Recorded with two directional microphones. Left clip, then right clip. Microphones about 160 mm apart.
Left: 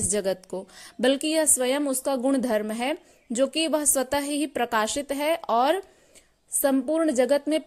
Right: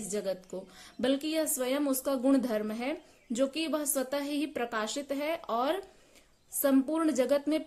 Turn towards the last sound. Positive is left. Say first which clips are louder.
# left 6 dB
turn(degrees=35)  # may be behind; listen again after turning